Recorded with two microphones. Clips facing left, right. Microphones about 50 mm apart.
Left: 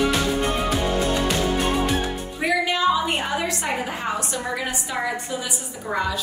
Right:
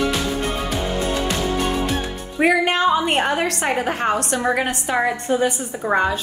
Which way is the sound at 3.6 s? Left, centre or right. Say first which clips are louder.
Right 5 dB; right.